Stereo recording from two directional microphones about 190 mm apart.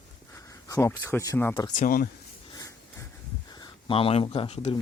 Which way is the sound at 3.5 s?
25° left (ahead or behind).